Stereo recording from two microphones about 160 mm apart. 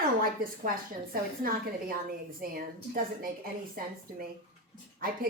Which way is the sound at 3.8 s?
65° right (ahead or behind).